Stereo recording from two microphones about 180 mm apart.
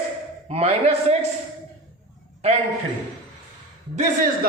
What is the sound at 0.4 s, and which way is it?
Speech, 35° right (ahead or behind).